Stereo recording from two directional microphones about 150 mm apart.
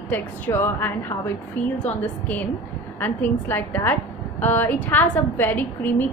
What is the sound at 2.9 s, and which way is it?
A woman's voice, 10° left (ahead or behind).